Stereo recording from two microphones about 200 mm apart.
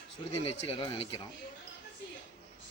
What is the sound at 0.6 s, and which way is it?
Speech, 30° left (ahead or behind).